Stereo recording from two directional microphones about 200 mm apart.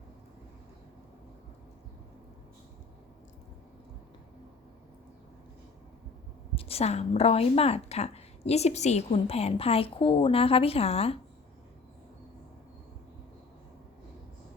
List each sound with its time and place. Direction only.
6.6 s a woman's voice: 30° left (ahead or behind)